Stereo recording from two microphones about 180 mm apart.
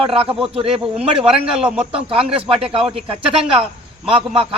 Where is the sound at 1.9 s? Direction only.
30° right (ahead or behind).